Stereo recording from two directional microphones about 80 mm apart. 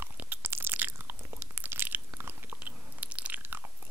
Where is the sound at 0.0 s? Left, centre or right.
Right.